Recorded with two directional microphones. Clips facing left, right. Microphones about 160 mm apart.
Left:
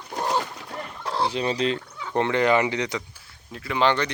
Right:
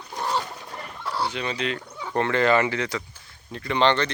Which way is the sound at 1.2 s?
35° left (ahead or behind).